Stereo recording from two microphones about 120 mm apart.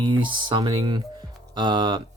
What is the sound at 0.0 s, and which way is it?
Speech, 40° right (ahead or behind).